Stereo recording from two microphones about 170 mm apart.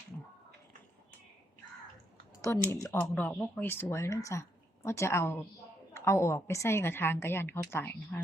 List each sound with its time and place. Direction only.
2.4 s speech: 15° left (ahead or behind)